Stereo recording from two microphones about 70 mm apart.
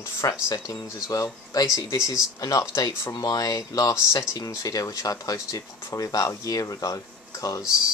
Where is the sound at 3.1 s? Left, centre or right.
Left.